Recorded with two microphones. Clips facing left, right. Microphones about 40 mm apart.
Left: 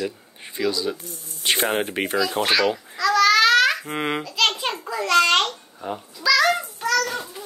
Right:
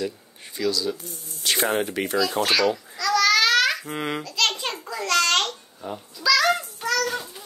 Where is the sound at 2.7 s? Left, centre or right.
Centre.